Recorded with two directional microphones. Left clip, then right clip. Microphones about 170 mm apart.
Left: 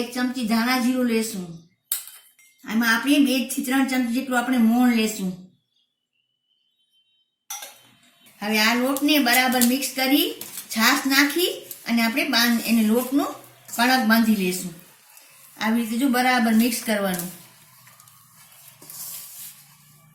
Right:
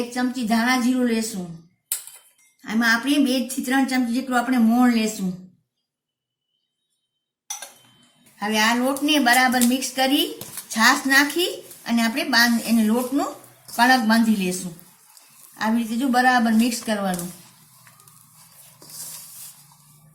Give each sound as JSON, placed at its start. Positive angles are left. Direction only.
{"t": 0.1, "sound": "speech", "side_deg": -15}
{"t": 2.6, "sound": "a woman's voice", "side_deg": -25}
{"t": 8.4, "sound": "speech", "side_deg": -10}
{"t": 15.5, "sound": "speech", "side_deg": -15}